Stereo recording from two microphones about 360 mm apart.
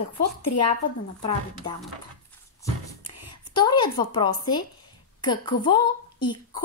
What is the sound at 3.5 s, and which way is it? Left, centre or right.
A woman's voice, centre.